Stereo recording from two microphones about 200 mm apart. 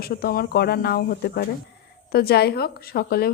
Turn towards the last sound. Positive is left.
turn(degrees=50)  # may be behind; listen again after turning